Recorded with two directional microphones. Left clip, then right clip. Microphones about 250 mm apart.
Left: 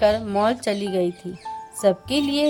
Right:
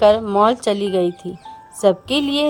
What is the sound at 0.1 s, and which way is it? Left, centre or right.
Speech, right.